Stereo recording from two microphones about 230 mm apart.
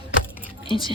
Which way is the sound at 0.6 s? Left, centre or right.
Left.